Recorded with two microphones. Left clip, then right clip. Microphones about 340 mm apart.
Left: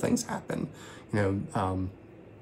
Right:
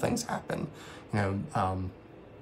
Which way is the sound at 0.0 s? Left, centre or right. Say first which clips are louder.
Left 1 dB; centre.